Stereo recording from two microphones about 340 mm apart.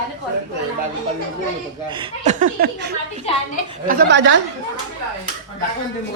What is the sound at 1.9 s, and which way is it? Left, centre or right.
Speech, right.